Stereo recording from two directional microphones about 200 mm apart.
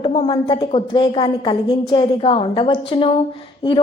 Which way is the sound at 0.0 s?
25° left (ahead or behind).